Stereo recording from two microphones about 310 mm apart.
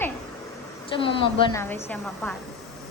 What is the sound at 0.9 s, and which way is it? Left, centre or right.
A woman's voice, centre.